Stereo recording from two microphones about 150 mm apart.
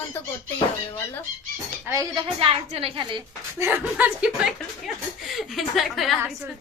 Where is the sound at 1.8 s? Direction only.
20° right (ahead or behind).